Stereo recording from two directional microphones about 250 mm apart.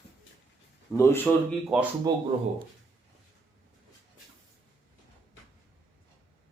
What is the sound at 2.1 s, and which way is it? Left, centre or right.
Speech, centre.